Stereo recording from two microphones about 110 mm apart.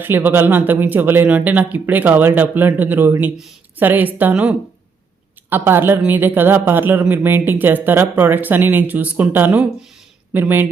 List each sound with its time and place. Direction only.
0.0 s a woman's voice: 15° right (ahead or behind)